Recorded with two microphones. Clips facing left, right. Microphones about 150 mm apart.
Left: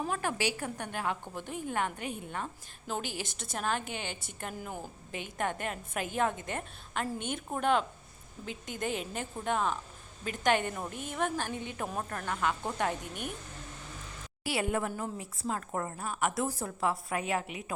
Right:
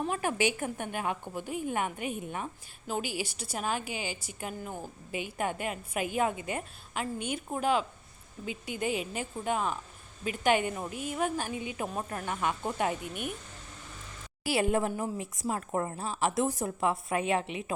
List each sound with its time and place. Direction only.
0.1 s a woman's voice: 15° right (ahead or behind)
4.5 s a woman's voice: 5° left (ahead or behind)
5.1 s a woman's voice: 10° right (ahead or behind)
14.5 s a woman's voice: 25° right (ahead or behind)